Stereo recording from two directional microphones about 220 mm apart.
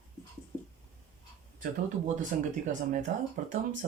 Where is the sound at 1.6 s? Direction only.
35° right (ahead or behind).